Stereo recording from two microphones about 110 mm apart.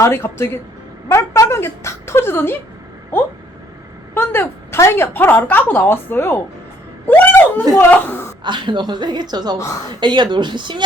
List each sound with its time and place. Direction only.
0.0 s a woman's voice: 25° left (ahead or behind)
4.1 s a woman's voice: 20° left (ahead or behind)
8.4 s a woman's voice: 45° right (ahead or behind)